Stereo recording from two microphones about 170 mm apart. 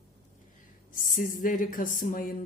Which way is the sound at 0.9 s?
50° left (ahead or behind).